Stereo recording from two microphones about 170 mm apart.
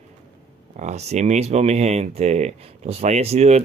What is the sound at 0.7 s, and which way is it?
Speech, 40° right (ahead or behind).